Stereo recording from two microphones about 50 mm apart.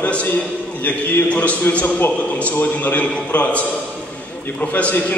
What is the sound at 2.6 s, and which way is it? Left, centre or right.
A man's voice, left.